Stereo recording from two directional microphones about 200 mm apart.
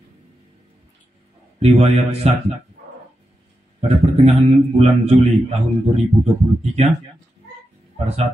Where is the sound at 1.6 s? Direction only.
30° right (ahead or behind).